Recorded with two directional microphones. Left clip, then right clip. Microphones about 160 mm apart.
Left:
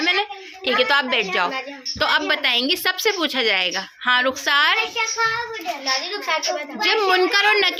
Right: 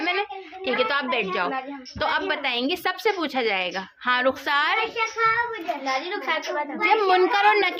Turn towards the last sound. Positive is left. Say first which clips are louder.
# left 2 dB
turn(degrees=10)  # may be behind; listen again after turning